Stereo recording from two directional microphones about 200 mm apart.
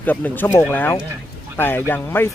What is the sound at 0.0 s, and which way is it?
Speech, 10° left (ahead or behind).